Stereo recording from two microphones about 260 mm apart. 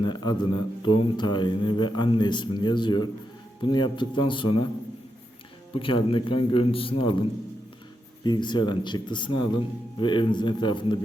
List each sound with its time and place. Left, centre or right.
0.0 s a man's voice: centre
5.7 s a man's voice: centre